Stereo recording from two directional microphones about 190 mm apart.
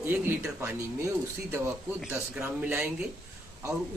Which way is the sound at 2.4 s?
10° right (ahead or behind).